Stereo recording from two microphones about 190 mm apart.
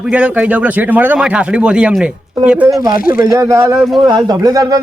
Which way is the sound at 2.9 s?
50° left (ahead or behind).